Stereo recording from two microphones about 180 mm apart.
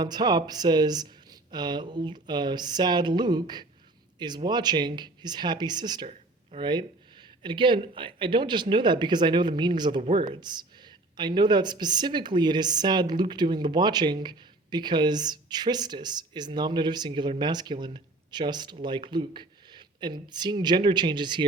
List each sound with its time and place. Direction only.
0.0 s a woman's voice: 25° right (ahead or behind)
6.1 s a sound: 35° right (ahead or behind)
6.7 s a woman's voice: 25° right (ahead or behind)